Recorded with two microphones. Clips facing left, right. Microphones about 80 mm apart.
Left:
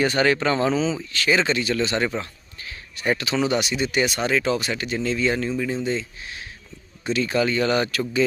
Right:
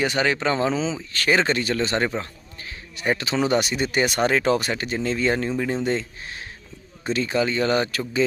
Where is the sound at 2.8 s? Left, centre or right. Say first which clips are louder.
Even; right.